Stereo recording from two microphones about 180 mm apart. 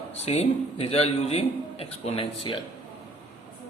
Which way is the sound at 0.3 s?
35° left (ahead or behind).